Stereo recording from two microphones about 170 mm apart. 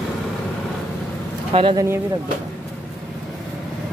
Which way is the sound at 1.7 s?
15° right (ahead or behind).